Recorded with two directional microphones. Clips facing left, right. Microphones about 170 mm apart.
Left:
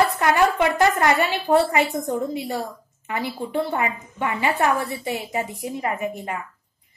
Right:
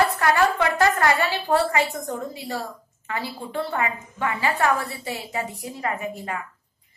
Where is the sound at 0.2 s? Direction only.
20° left (ahead or behind).